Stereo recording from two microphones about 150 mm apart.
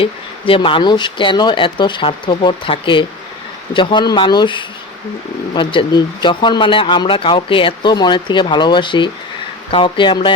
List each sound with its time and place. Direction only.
0.0 s speech: 35° left (ahead or behind)